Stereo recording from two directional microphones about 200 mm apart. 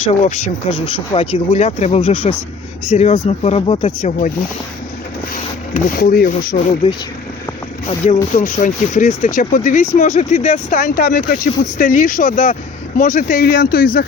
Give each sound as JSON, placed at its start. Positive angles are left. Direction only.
{"t": 0.3, "sound": "speech", "side_deg": 30}
{"t": 5.3, "sound": "speech", "side_deg": 40}
{"t": 7.9, "sound": "speech", "side_deg": 35}